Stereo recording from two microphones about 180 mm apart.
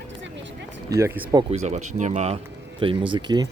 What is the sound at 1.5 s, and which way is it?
Speech, 40° right (ahead or behind).